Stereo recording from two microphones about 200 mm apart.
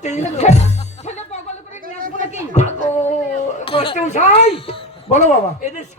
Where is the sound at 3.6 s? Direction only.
25° left (ahead or behind).